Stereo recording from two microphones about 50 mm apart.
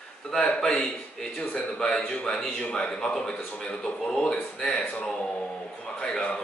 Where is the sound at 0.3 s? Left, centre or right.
Centre.